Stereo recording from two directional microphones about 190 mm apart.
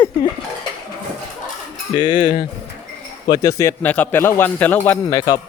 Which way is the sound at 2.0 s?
25° left (ahead or behind).